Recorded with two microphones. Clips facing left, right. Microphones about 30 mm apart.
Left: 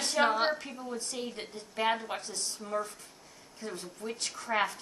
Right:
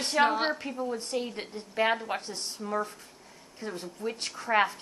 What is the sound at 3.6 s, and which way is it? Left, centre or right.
Speech, right.